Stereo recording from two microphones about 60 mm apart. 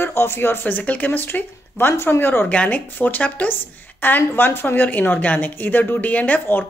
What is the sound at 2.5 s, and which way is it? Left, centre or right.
Speech, left.